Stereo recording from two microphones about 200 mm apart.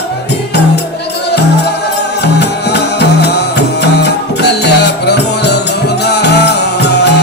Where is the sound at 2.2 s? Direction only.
55° left (ahead or behind).